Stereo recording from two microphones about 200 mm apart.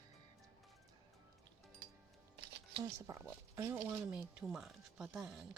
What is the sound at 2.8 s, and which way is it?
Speech, 15° right (ahead or behind).